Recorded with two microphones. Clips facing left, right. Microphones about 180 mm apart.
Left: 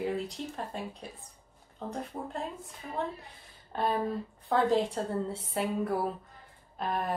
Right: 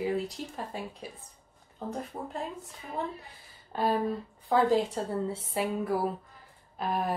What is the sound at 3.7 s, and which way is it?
Speech, 5° right (ahead or behind).